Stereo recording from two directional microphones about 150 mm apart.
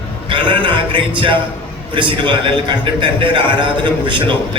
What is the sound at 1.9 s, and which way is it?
A man's voice, 30° right (ahead or behind).